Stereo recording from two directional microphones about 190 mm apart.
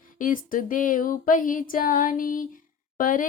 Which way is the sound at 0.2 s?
45° left (ahead or behind).